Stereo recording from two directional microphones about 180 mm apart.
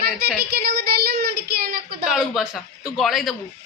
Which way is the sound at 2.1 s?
5° right (ahead or behind).